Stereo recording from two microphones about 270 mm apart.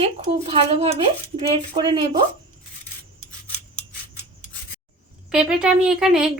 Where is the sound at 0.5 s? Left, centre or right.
Right.